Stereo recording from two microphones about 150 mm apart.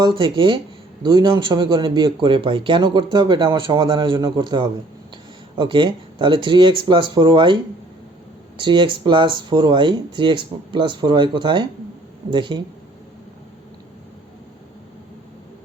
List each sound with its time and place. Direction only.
0.0 s speech: 30° right (ahead or behind)